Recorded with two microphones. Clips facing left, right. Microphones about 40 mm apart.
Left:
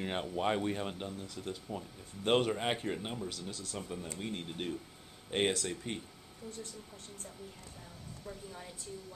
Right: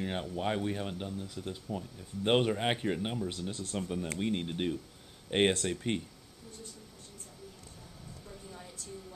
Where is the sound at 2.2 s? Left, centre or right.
Centre.